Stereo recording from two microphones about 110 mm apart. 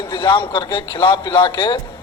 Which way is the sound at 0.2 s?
45° left (ahead or behind).